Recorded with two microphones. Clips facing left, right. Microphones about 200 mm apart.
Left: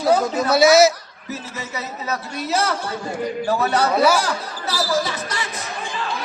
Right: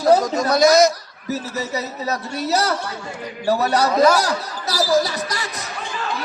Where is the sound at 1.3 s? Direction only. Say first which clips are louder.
Right 6 dB; 40° right (ahead or behind).